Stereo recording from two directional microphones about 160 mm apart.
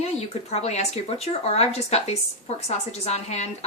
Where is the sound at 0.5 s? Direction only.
40° left (ahead or behind).